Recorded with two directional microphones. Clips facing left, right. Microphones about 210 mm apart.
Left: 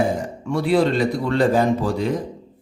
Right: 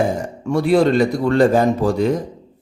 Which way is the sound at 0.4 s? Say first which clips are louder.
Right 4 dB; 45° right (ahead or behind).